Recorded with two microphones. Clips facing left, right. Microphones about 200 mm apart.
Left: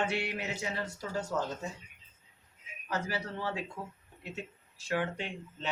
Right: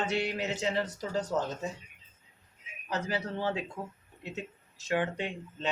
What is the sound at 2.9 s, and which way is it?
Speech, 20° right (ahead or behind).